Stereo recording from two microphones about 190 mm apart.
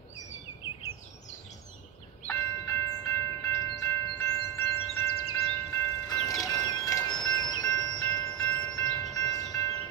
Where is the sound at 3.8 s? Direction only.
15° left (ahead or behind).